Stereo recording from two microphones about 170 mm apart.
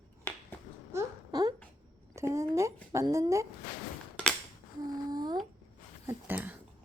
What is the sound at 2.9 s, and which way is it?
Speech, 20° right (ahead or behind).